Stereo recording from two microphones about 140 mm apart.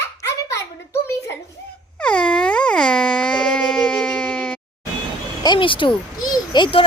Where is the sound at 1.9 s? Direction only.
10° left (ahead or behind).